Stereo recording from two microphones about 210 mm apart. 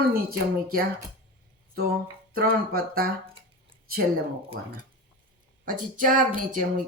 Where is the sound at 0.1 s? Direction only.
45° right (ahead or behind).